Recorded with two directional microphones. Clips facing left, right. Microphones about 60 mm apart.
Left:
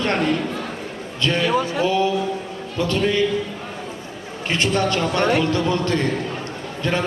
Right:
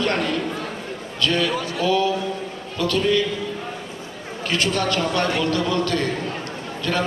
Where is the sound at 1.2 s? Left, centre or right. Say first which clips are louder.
Left 2 dB; left.